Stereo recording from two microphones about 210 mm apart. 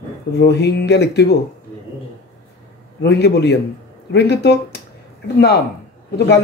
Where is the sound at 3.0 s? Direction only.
55° left (ahead or behind).